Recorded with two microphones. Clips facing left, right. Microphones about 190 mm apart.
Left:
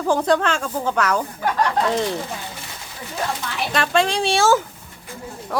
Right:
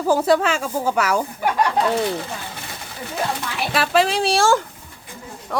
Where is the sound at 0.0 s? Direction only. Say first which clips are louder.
Right 1 dB; 5° right (ahead or behind).